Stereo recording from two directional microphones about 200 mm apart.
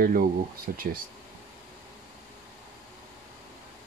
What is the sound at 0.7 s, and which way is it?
Speech, 45° right (ahead or behind).